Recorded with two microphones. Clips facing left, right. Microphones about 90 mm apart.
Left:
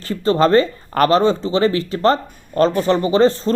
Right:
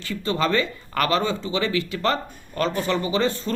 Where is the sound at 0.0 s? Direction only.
40° left (ahead or behind).